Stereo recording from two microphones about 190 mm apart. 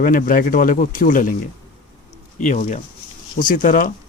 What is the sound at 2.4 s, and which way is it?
Speech, 40° left (ahead or behind).